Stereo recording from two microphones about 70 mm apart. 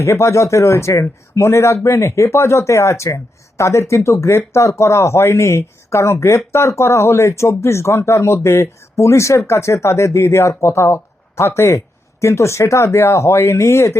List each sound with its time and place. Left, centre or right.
0.0 s speech: left